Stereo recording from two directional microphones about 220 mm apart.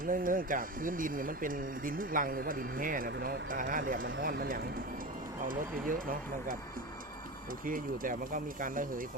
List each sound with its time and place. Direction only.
0.0 s speech: 40° right (ahead or behind)
7.6 s speech: 40° right (ahead or behind)